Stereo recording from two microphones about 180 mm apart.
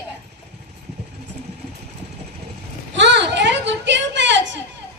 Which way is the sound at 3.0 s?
75° right (ahead or behind).